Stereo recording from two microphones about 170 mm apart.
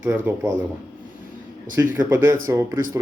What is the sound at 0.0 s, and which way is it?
Speech, 10° right (ahead or behind).